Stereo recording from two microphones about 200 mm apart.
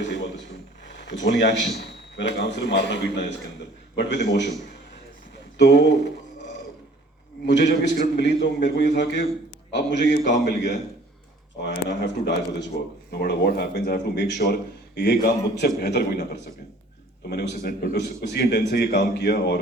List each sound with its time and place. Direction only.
0.0 s a sound: 60° left (ahead or behind)
0.9 s a man's voice: 60° left (ahead or behind)
5.5 s a man's voice: 60° left (ahead or behind)
7.4 s a man's voice: 60° left (ahead or behind)